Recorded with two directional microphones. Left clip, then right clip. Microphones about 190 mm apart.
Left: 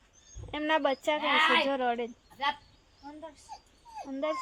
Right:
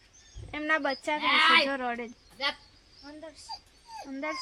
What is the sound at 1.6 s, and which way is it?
Speech, 20° left (ahead or behind).